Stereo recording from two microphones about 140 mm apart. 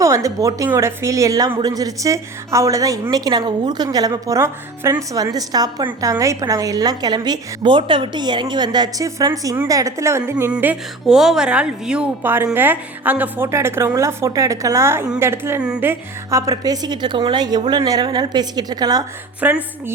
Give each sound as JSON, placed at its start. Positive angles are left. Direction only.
{"t": 0.0, "sound": "a woman's voice", "side_deg": -25}
{"t": 19.4, "sound": "a woman's voice", "side_deg": -10}